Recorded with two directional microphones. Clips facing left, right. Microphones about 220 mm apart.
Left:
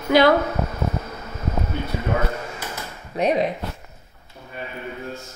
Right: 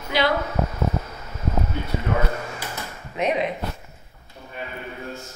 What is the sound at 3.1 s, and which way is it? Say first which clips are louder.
Speech: left 3 dB; 35° left (ahead or behind).